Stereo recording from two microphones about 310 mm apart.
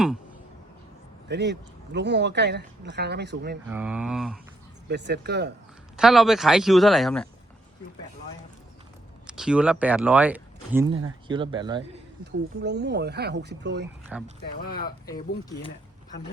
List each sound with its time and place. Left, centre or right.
1.3 s speech: right
3.7 s speech: centre
4.9 s speech: right
6.0 s speech: centre
9.2 s speech: centre
11.8 s speech: right
14.1 s speech: centre
15.4 s speech: centre